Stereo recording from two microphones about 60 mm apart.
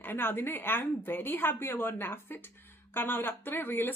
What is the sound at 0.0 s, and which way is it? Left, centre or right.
Speech, left.